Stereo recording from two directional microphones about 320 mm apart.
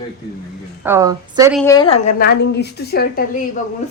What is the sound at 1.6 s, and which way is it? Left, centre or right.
A woman's voice, centre.